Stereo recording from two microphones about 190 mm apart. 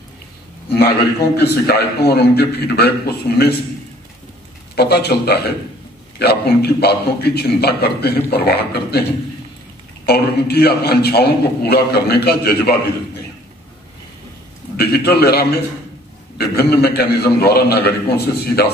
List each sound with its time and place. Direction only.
0.7 s a man's voice: 55° left (ahead or behind)
4.7 s a man's voice: 60° left (ahead or behind)
10.0 s a man's voice: 55° left (ahead or behind)
14.8 s a man's voice: 55° left (ahead or behind)